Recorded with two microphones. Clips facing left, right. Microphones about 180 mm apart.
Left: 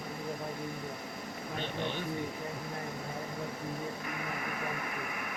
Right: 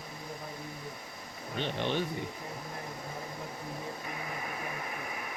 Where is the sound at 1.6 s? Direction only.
75° right (ahead or behind).